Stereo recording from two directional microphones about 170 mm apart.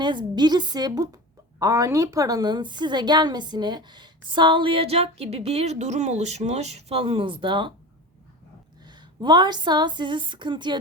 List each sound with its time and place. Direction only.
0.0 s a woman's voice: 25° right (ahead or behind)
8.9 s a woman's voice: 25° right (ahead or behind)